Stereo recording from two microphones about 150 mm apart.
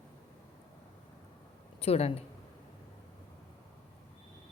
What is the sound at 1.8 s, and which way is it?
Speech, 40° left (ahead or behind).